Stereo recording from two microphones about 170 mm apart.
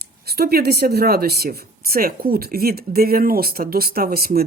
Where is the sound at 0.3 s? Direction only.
65° right (ahead or behind).